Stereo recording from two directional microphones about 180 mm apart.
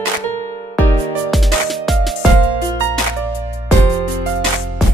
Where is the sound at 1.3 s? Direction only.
Centre (ahead or behind).